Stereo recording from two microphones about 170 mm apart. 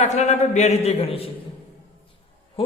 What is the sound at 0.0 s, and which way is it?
A man's voice, 40° left (ahead or behind).